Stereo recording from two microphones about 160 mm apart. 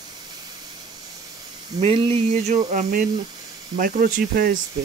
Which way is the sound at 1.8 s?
35° right (ahead or behind).